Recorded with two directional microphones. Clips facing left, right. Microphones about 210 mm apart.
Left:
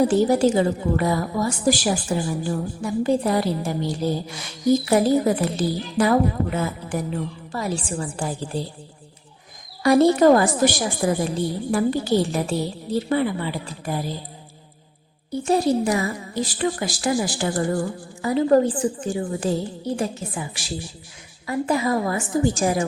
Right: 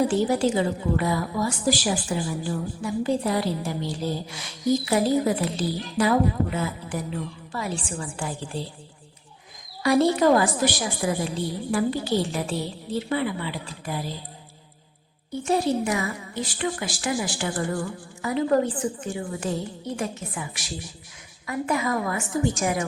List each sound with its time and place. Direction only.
0.1 s a woman's voice: 40° left (ahead or behind)
9.8 s a woman's voice: 45° left (ahead or behind)
15.3 s a woman's voice: 35° left (ahead or behind)